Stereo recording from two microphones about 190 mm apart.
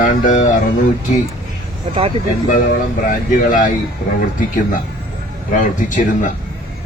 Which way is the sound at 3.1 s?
45° left (ahead or behind).